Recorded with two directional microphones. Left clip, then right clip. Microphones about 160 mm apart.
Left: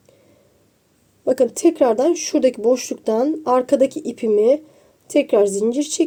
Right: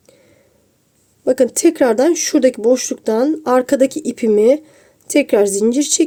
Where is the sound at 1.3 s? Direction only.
25° right (ahead or behind).